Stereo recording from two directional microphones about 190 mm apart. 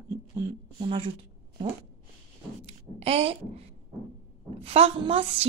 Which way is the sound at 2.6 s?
30° right (ahead or behind).